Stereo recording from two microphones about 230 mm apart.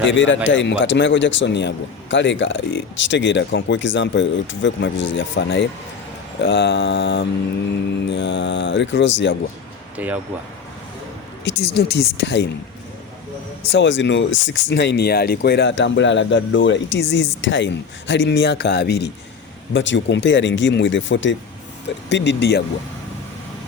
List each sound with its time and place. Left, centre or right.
0.0 s a man's voice: left
11.4 s a man's voice: left
13.7 s a man's voice: left